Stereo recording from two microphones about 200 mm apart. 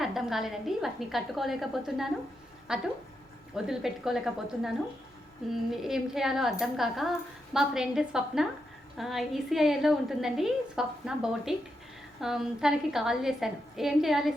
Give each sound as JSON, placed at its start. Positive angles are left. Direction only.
{"t": 0.0, "sound": "a woman's voice", "side_deg": 0}
{"t": 5.7, "sound": "a woman's voice", "side_deg": 0}